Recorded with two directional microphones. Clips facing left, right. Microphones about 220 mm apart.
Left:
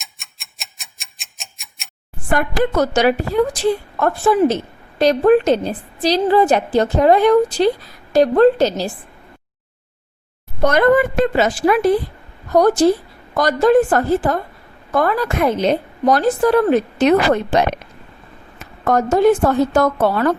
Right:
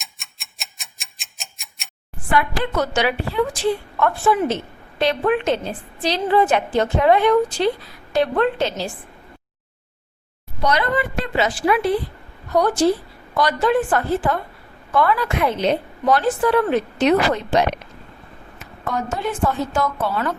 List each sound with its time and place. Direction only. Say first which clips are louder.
0.0 s tick-tock: even; centre (ahead or behind)
2.3 s a woman's voice: left 4 dB; 45° left (ahead or behind)
10.6 s a woman's voice: left 7 dB; 50° left (ahead or behind)
20.0 s a woman's voice: left 7 dB; 55° left (ahead or behind)